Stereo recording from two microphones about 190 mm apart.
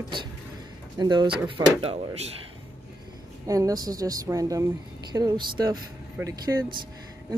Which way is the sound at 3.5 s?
20° right (ahead or behind).